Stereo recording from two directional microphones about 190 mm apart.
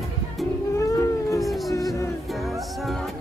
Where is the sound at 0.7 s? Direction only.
15° left (ahead or behind).